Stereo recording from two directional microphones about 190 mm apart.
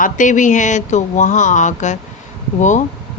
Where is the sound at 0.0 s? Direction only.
40° left (ahead or behind).